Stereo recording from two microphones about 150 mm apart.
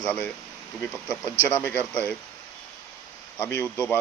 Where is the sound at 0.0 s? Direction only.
10° left (ahead or behind).